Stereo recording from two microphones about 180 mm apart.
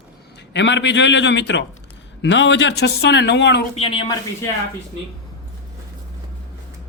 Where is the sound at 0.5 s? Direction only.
85° left.